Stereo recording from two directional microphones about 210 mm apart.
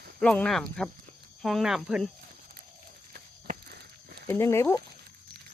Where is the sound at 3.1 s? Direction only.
50° right (ahead or behind).